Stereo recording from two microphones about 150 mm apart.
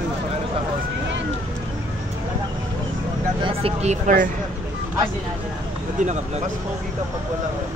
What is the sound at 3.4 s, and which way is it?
Speech, 40° right (ahead or behind).